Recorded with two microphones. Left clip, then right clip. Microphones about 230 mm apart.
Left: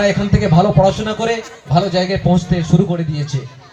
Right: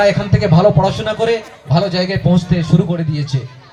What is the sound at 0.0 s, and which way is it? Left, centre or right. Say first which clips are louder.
A man's voice: right 2 dB; right.